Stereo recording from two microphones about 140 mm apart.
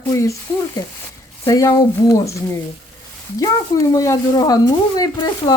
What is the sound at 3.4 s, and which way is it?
Speech, 25° left (ahead or behind).